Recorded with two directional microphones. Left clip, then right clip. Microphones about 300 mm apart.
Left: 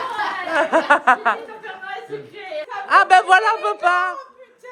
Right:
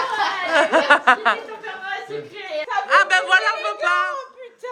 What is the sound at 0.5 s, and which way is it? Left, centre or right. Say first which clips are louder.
Speech: right 1 dB; centre.